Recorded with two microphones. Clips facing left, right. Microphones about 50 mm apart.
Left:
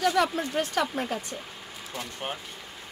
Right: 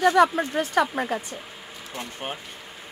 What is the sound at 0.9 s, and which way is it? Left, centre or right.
Speech, right.